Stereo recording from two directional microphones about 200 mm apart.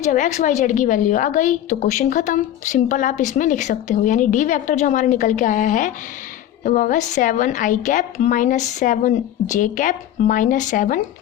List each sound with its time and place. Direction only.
0.0 s a woman's voice: 35° left (ahead or behind)